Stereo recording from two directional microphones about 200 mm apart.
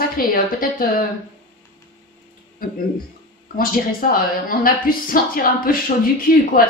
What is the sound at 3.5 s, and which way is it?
Speech, 45° left (ahead or behind).